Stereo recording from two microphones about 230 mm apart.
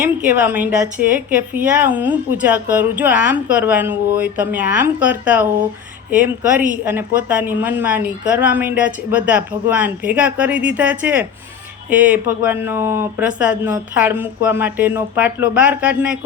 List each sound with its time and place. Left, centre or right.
0.0 s a woman's voice: centre